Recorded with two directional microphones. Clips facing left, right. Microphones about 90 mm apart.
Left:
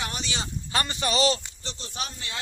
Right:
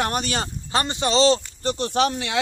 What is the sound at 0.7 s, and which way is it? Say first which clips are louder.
Speech: right 6 dB; 25° right (ahead or behind).